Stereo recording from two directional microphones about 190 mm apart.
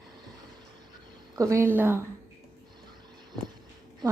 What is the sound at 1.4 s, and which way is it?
Speech, 15° right (ahead or behind).